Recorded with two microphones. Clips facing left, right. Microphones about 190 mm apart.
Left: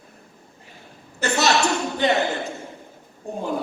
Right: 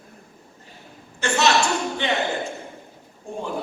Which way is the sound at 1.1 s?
40° left (ahead or behind).